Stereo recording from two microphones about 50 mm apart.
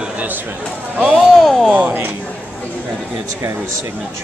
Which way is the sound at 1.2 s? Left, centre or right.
Centre.